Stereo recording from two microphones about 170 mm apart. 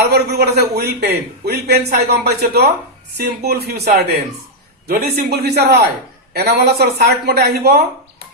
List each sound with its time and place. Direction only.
0.1 s a man's voice: 70° right (ahead or behind)